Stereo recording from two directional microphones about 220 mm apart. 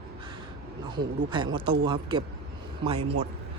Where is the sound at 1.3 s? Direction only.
20° right (ahead or behind).